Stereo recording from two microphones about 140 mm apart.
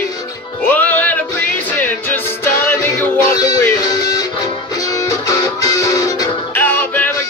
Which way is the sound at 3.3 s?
30° left (ahead or behind).